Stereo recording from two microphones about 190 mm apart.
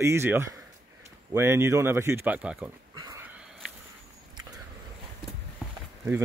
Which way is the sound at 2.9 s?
20° right (ahead or behind).